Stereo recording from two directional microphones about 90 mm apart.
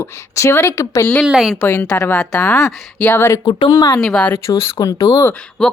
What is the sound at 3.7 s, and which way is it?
Speech, 50° left (ahead or behind).